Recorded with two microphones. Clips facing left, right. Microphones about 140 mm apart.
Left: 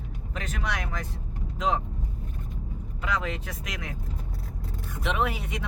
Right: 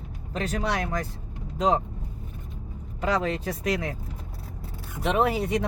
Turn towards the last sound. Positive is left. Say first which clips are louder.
# right 6 dB
turn(degrees=-35)  # may be behind; listen again after turning